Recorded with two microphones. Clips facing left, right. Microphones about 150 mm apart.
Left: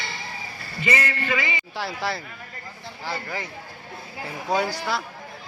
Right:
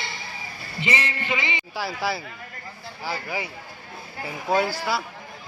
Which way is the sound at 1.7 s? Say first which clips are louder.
Right 1 dB; 5° right (ahead or behind).